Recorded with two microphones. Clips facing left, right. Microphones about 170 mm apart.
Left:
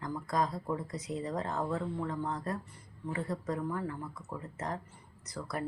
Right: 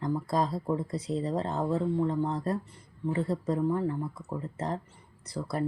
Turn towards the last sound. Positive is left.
turn(degrees=-30)  # may be behind; listen again after turning